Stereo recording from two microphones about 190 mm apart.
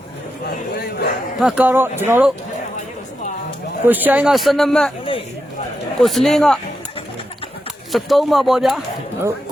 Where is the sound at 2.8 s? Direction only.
40° left (ahead or behind).